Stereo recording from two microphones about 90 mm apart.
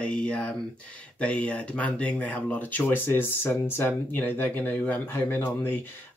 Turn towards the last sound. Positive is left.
turn(degrees=25)  # may be behind; listen again after turning